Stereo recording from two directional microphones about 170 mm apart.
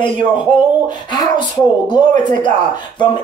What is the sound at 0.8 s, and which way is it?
Speech, 25° left (ahead or behind).